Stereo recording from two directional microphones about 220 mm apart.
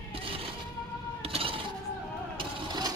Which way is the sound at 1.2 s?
25° right (ahead or behind).